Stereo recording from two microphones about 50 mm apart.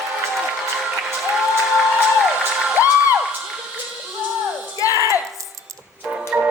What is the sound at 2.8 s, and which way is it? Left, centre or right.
Music, right.